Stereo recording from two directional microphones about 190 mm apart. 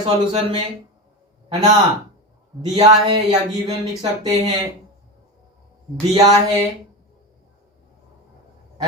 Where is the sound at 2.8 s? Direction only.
20° right (ahead or behind).